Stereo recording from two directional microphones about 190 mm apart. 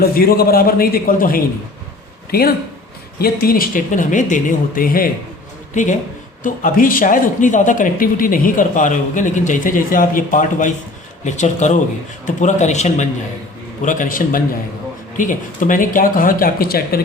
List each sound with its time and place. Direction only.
0.0 s a man's voice: 55° left (ahead or behind)